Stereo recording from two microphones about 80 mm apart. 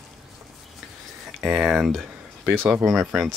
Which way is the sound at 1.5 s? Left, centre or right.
Centre.